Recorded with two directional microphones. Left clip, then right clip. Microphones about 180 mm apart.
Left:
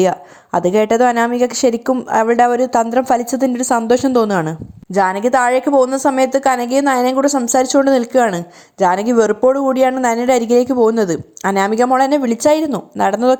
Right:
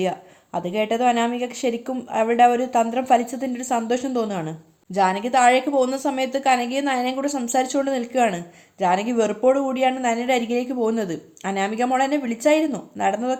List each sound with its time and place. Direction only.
0.0 s a woman's voice: 45° left (ahead or behind)